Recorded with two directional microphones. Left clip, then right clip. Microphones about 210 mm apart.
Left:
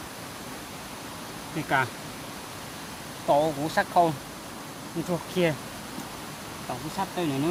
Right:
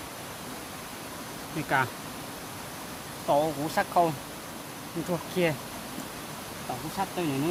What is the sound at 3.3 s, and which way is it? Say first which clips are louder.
Speech: left 2 dB; 15° left (ahead or behind).